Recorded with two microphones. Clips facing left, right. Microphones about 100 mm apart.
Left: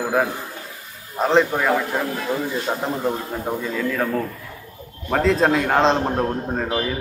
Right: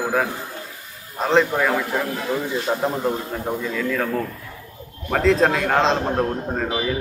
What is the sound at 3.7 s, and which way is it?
Speech, 10° left (ahead or behind).